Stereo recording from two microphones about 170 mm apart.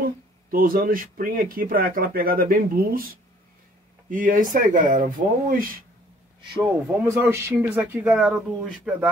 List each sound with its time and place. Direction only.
0.0 s speech: 55° right (ahead or behind)
6.6 s speech: 15° right (ahead or behind)